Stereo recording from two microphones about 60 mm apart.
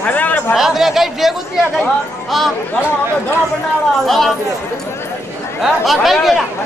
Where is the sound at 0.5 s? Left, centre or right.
Centre.